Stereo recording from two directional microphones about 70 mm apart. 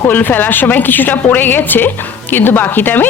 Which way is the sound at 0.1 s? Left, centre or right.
Left.